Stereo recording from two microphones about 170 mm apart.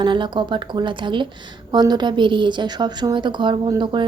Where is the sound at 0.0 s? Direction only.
30° right (ahead or behind).